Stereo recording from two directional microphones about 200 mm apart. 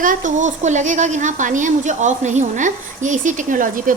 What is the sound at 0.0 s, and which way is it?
A woman's voice, 40° right (ahead or behind).